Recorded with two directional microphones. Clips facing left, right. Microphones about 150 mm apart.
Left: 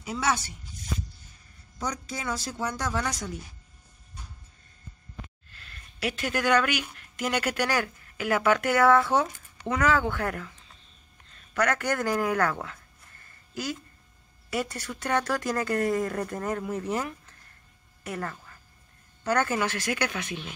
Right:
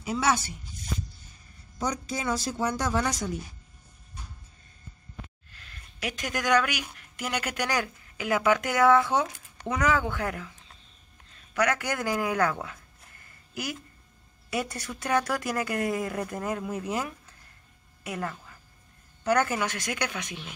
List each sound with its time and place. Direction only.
0.0 s speech: 10° right (ahead or behind)
1.8 s a woman's voice: 20° right (ahead or behind)
5.5 s speech: 15° right (ahead or behind)
11.5 s speech: 10° right (ahead or behind)
14.5 s speech: 15° right (ahead or behind)